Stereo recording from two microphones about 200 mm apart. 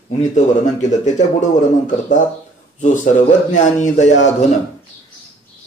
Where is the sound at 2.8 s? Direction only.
40° left (ahead or behind).